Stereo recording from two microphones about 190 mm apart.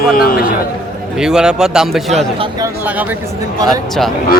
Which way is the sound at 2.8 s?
10° right (ahead or behind).